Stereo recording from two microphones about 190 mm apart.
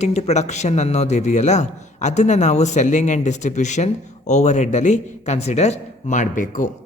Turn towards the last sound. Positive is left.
turn(degrees=45)  # may be behind; listen again after turning